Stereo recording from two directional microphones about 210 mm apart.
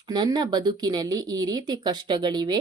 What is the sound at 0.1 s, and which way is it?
Speech, 20° right (ahead or behind).